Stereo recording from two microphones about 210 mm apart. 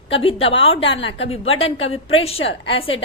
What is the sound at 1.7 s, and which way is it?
A woman's voice, 75° left (ahead or behind).